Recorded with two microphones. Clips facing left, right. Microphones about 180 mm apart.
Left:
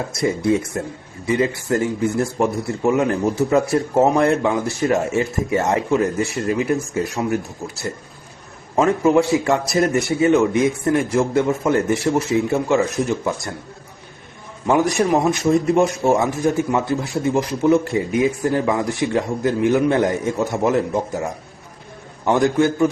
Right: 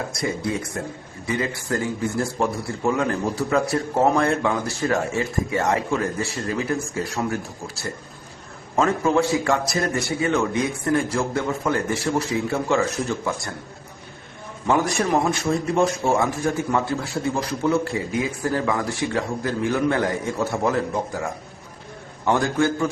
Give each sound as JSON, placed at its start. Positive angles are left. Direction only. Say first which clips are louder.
{"t": 0.1, "sound": "speech", "louder": "left 7 dB", "side_deg": 25}
{"t": 8.7, "sound": "speech", "louder": "left 4 dB", "side_deg": 20}
{"t": 14.7, "sound": "speech", "louder": "left 4 dB", "side_deg": 15}
{"t": 22.2, "sound": "a man's voice", "louder": "left 4 dB", "side_deg": 15}